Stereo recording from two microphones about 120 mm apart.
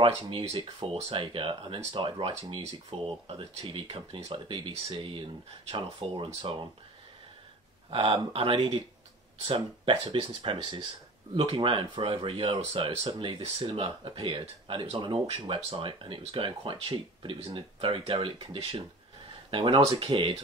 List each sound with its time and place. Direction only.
0.0 s speech: 55° right (ahead or behind)
7.9 s speech: 50° right (ahead or behind)